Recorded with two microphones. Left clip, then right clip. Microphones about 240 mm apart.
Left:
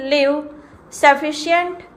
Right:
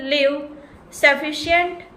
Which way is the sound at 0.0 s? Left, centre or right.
Centre.